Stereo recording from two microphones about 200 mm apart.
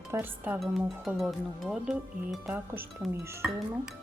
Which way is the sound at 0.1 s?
10° right (ahead or behind).